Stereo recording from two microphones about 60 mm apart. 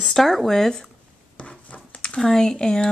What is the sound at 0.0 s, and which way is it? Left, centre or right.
Speech, centre.